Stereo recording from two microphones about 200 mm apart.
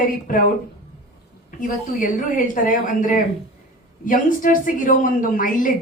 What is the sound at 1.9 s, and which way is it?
A woman's voice, 45° left (ahead or behind).